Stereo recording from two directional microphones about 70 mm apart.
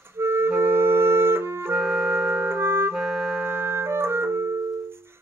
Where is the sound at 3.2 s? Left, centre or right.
Right.